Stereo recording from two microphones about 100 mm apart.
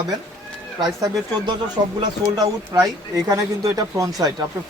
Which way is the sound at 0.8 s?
45° right (ahead or behind).